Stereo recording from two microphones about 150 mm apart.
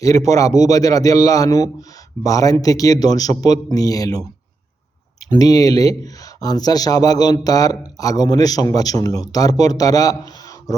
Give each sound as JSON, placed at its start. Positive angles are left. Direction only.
{"t": 0.0, "sound": "speech", "side_deg": 20}
{"t": 5.3, "sound": "speech", "side_deg": 25}